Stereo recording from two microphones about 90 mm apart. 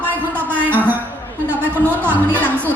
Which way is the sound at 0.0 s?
20° right (ahead or behind).